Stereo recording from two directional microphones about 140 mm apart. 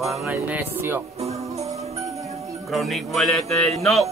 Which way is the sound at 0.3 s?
15° right (ahead or behind).